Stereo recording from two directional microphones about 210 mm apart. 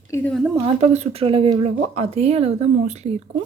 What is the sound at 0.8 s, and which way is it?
A woman's voice, 30° right (ahead or behind).